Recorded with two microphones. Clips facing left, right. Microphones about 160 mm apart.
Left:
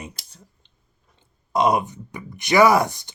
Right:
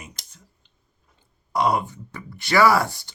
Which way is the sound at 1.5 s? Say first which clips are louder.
Left 2 dB; 20° left (ahead or behind).